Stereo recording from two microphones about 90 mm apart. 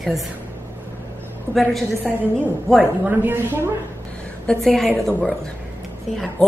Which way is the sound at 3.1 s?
25° right (ahead or behind).